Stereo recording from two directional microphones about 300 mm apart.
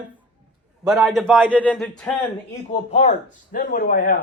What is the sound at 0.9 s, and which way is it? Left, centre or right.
A man's voice, centre.